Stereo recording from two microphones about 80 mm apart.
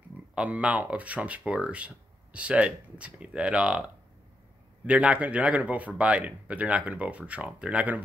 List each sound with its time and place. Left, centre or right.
0.3 s speech: centre
4.8 s speech: centre